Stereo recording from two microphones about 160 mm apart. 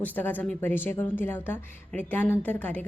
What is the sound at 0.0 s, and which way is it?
A woman's voice, 10° left (ahead or behind).